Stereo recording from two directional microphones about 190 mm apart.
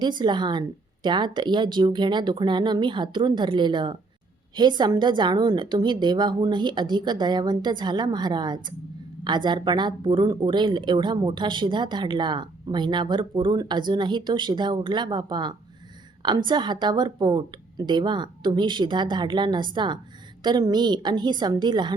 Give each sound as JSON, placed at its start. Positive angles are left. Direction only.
{"t": 0.0, "sound": "a woman's voice", "side_deg": -25}